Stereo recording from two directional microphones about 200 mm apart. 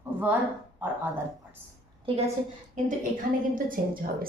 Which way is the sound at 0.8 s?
10° right (ahead or behind).